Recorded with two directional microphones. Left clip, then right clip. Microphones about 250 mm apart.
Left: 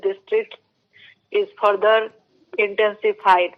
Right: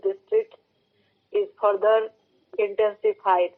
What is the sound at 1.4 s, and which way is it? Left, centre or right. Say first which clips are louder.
Speech: left 4 dB; left.